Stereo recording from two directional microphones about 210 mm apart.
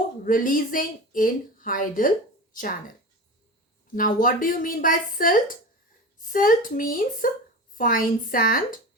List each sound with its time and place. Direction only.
0.3 s speech: 40° left (ahead or behind)
3.9 s speech: 40° left (ahead or behind)